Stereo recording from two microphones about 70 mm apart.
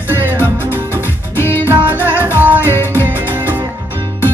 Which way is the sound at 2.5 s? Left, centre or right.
Left.